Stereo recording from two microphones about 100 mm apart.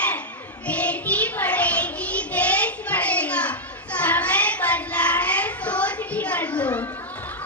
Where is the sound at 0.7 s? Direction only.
15° left (ahead or behind).